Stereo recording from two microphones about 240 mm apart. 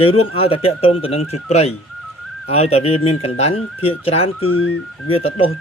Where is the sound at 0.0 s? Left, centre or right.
Left.